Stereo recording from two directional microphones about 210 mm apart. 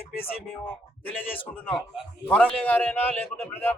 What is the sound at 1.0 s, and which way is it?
A man's voice, 10° left (ahead or behind).